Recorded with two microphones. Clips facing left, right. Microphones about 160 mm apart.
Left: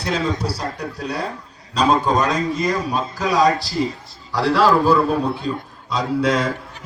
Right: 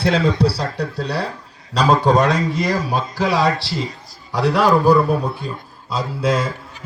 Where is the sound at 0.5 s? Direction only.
70° right (ahead or behind).